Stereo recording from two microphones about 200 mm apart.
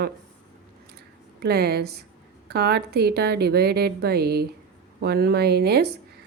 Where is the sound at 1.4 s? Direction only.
50° right (ahead or behind).